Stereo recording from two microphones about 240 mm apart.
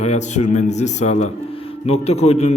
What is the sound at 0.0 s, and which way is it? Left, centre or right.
A man's voice, left.